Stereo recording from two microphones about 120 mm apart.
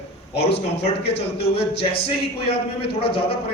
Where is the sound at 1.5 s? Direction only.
55° left (ahead or behind).